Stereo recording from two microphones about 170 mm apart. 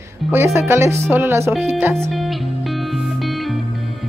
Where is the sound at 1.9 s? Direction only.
Centre (ahead or behind).